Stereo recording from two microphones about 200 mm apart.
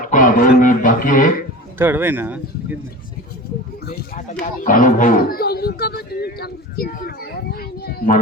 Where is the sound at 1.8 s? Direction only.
10° right (ahead or behind).